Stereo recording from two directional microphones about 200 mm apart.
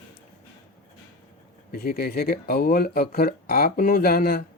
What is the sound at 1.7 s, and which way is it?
Speech, 50° left (ahead or behind).